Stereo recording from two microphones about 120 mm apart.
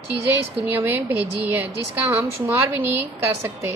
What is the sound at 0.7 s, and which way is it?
A woman's voice, 15° right (ahead or behind).